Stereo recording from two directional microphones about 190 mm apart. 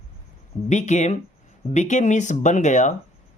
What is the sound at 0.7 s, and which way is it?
Speech, 40° left (ahead or behind).